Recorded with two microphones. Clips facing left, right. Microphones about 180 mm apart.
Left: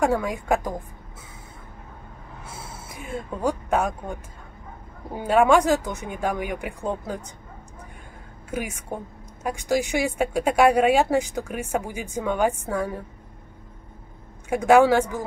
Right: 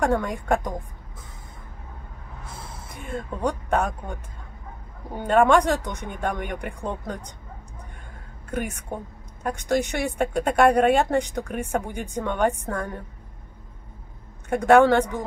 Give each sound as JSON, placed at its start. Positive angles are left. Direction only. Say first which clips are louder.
{"t": 0.0, "sound": "a woman's voice", "louder": "left 1 dB", "side_deg": 5}
{"t": 2.4, "sound": "gasp", "louder": "left 1 dB", "side_deg": 5}
{"t": 5.1, "sound": "a woman's voice", "louder": "even", "side_deg": 5}
{"t": 8.5, "sound": "a woman's voice", "louder": "right 1 dB", "side_deg": 5}
{"t": 14.5, "sound": "speech", "louder": "even", "side_deg": 5}